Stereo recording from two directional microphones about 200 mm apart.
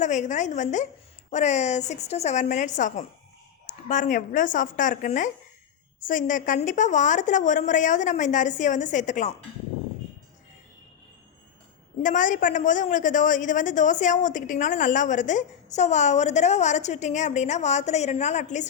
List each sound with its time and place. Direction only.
0.0 s a man's voice: 35° left (ahead or behind)
12.0 s a man's voice: 40° left (ahead or behind)